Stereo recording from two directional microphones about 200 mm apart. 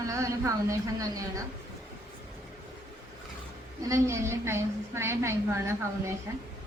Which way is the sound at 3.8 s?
15° right (ahead or behind).